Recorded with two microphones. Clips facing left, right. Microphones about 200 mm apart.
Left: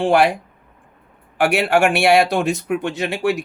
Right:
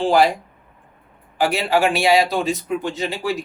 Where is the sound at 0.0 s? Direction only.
65° left (ahead or behind).